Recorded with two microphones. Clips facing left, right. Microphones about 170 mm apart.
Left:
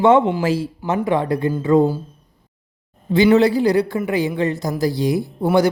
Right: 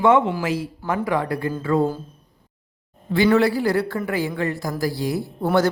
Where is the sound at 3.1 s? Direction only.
20° left (ahead or behind).